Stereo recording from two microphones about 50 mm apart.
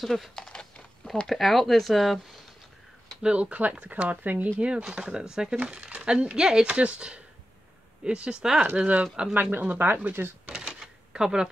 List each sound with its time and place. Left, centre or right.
0.0 s speech: centre
0.4 s a sound: centre
1.2 s speech: centre
3.2 s speech: right
4.6 s speech: centre
8.5 s speech: right
9.0 s speech: centre
9.3 s speech: right
10.5 s typewriter: centre